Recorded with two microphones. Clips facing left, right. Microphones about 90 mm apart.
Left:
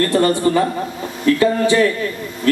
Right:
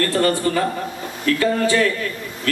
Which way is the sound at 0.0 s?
25° left (ahead or behind).